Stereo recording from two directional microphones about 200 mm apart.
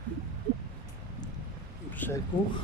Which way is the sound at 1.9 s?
10° left (ahead or behind).